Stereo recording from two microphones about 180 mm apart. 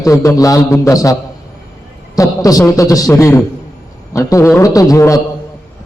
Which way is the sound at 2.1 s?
20° left (ahead or behind).